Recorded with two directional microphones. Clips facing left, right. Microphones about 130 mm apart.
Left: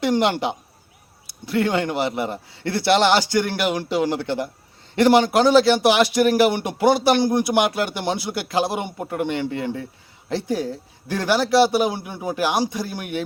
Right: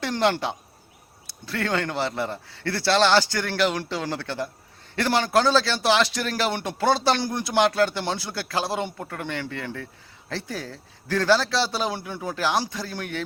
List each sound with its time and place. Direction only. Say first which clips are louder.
0.0 s a man's voice: left 4 dB; 15° left (ahead or behind)